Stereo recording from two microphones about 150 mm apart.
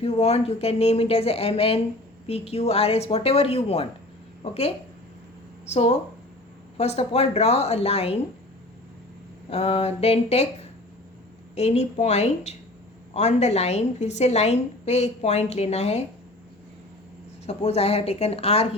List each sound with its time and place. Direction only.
0.0 s a woman's voice: 45° left (ahead or behind)
5.7 s a woman's voice: 45° left (ahead or behind)
9.5 s a woman's voice: 40° left (ahead or behind)
17.4 s a woman's voice: 45° left (ahead or behind)